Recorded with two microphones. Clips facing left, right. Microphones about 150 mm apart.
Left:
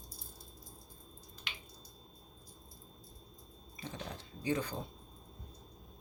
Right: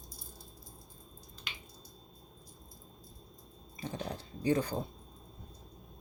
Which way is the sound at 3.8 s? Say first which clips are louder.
Right 5 dB; 35° right (ahead or behind).